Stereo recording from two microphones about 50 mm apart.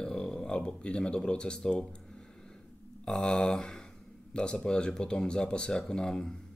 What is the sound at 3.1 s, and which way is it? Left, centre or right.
Speech, centre.